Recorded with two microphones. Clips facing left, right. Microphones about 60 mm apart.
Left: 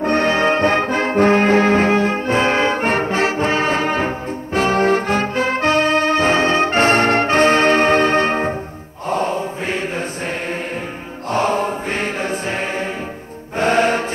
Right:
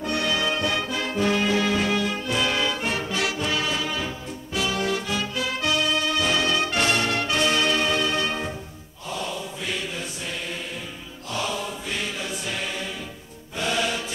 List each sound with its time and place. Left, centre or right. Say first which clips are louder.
0.0 s brass instrument: left 9 dB; left
9.1 s mantra: left 11 dB; left
11.2 s choir: left 11 dB; left
13.6 s music: left 10 dB; left